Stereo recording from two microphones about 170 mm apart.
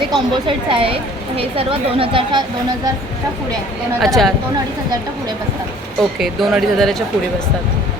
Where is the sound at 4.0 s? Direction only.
Centre (ahead or behind).